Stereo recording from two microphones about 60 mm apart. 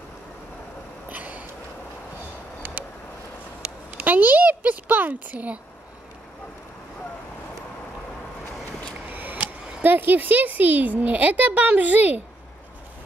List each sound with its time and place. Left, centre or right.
1.0 s a sound: right
2.8 s vehicle: right
3.6 s speech: right
9.1 s speech: right